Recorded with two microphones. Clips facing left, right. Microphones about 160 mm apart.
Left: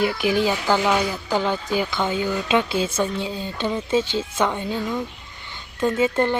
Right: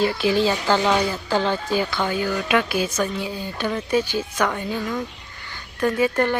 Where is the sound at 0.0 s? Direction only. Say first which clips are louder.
Right 1 dB; 15° left (ahead or behind).